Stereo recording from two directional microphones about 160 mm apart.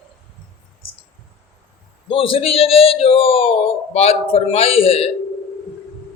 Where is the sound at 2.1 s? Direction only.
35° left (ahead or behind).